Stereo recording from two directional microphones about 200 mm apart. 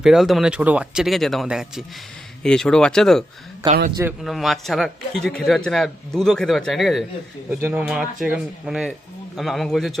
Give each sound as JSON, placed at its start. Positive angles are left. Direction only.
{"t": 0.0, "sound": "a man's voice", "side_deg": 0}
{"t": 3.6, "sound": "a man's voice", "side_deg": -20}
{"t": 4.2, "sound": "a man's voice", "side_deg": 0}